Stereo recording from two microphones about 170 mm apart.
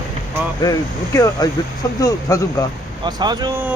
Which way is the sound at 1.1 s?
20° left (ahead or behind).